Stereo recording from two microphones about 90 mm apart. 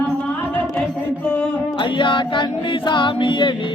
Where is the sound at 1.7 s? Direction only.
65° left (ahead or behind).